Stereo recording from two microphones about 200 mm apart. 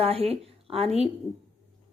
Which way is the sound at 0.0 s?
30° right (ahead or behind).